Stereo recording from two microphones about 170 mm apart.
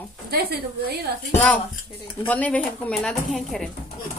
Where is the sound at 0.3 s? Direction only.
65° right (ahead or behind).